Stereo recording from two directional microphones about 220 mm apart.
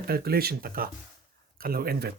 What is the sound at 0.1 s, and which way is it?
Speech, 45° right (ahead or behind).